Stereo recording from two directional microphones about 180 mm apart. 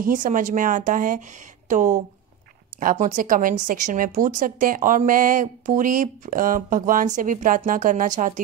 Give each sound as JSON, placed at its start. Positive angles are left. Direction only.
{"t": 0.0, "sound": "a woman's voice", "side_deg": -45}